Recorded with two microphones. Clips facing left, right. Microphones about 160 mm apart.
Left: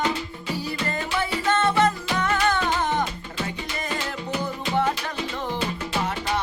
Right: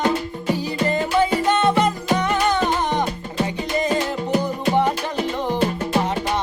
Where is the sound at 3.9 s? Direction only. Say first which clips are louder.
Right 8 dB; 45° right (ahead or behind).